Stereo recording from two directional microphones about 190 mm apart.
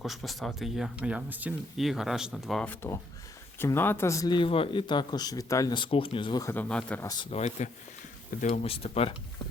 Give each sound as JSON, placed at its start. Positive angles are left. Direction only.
{"t": 0.0, "sound": "speech", "side_deg": 0}
{"t": 7.1, "sound": "speech", "side_deg": 30}